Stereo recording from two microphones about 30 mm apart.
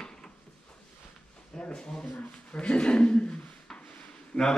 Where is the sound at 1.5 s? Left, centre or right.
Left.